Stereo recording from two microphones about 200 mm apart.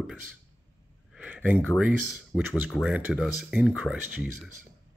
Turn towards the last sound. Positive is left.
turn(degrees=-5)  # may be behind; listen again after turning